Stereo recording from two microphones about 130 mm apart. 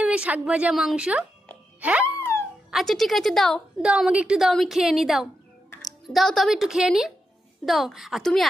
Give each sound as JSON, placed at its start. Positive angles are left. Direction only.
{"t": 0.0, "sound": "a woman's voice", "side_deg": -10}
{"t": 1.8, "sound": "wail", "side_deg": -10}
{"t": 2.1, "sound": "wail", "side_deg": 20}
{"t": 2.7, "sound": "a woman's voice", "side_deg": 0}